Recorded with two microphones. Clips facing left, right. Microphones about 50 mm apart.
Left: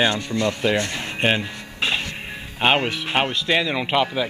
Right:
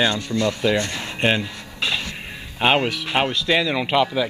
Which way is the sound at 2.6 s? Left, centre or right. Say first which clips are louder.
Right 1 dB; centre.